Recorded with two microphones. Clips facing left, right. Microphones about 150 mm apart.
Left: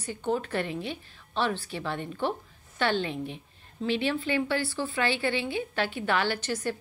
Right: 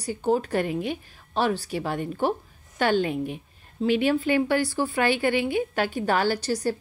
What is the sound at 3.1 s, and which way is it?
Speech, 10° right (ahead or behind).